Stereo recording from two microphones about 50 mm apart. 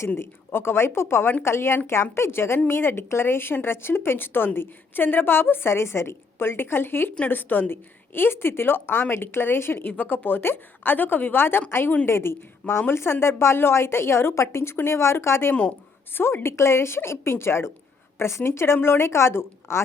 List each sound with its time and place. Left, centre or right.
0.2 s a woman's voice: left
9.8 s a woman's voice: left